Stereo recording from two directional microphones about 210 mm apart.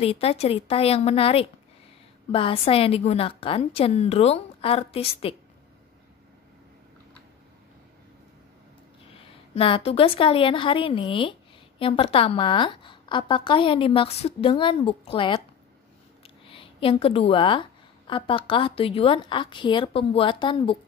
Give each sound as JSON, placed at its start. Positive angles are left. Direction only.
{"t": 0.0, "sound": "a woman's voice", "side_deg": 30}
{"t": 9.6, "sound": "a woman's voice", "side_deg": 25}
{"t": 16.4, "sound": "a woman's voice", "side_deg": 25}